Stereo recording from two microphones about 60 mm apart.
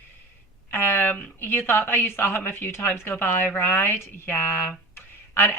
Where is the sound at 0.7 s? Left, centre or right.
Left.